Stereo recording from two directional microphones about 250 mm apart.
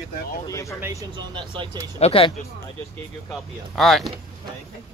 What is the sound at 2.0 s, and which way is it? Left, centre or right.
Speech, left.